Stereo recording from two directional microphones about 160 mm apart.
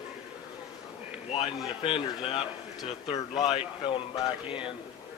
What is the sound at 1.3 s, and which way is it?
Speech, 35° left (ahead or behind).